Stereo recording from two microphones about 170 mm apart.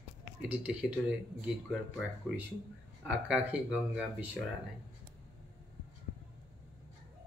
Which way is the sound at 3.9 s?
5° right (ahead or behind).